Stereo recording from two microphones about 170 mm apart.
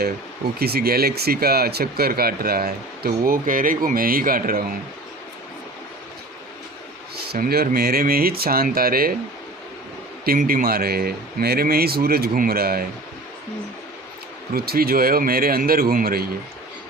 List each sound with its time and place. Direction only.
0.6 s speech: 65° right (ahead or behind)
7.3 s speech: 60° right (ahead or behind)
10.2 s speech: 55° right (ahead or behind)
14.5 s speech: 65° right (ahead or behind)